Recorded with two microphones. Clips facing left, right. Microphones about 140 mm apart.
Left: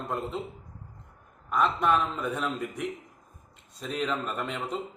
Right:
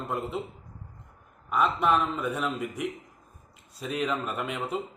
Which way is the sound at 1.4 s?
5° right (ahead or behind).